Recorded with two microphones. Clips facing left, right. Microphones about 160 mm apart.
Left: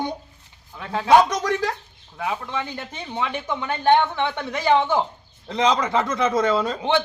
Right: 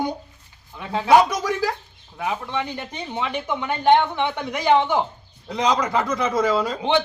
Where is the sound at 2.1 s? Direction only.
15° right (ahead or behind).